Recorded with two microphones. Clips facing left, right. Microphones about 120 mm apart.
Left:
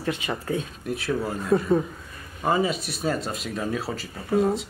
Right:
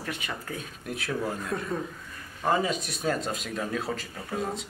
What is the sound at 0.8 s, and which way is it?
Speech, centre (ahead or behind).